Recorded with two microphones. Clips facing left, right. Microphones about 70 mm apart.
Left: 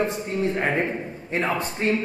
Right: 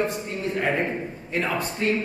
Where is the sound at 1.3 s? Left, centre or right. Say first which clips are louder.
Left 1 dB; left.